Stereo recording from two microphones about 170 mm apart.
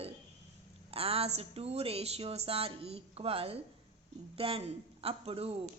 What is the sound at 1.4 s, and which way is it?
Speech, 35° right (ahead or behind).